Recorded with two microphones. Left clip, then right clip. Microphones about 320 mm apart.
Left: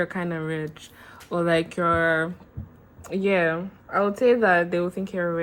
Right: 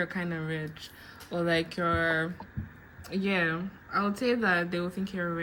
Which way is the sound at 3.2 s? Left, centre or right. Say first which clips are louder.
Left 7 dB; centre.